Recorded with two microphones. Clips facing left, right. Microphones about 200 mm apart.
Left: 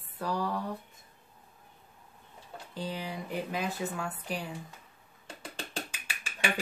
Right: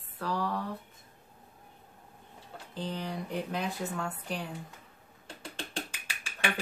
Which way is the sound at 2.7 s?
10° left (ahead or behind).